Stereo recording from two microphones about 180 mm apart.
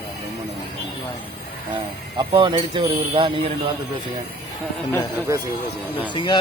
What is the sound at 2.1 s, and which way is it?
A man's voice, 30° right (ahead or behind).